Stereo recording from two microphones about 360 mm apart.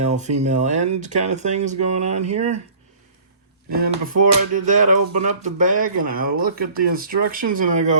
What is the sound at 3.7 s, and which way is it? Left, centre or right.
Speech, right.